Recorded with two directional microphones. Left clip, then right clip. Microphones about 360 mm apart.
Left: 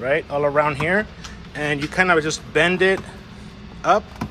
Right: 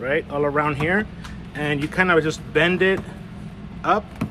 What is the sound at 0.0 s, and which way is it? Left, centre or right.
Speech, centre.